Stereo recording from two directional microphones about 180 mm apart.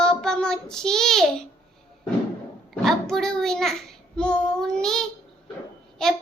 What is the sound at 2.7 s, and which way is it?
Child singing, centre (ahead or behind).